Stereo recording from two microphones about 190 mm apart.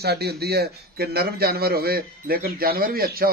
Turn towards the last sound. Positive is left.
turn(degrees=-50)  # may be behind; listen again after turning